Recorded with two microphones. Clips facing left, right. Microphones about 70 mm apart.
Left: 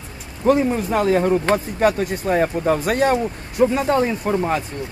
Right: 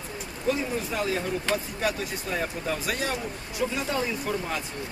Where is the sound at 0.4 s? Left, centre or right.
Left.